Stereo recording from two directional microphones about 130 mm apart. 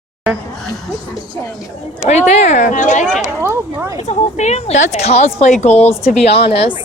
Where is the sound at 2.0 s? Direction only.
60° left (ahead or behind).